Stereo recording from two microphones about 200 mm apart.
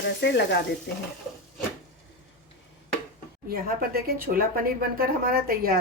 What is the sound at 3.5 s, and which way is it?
Speech, 45° right (ahead or behind).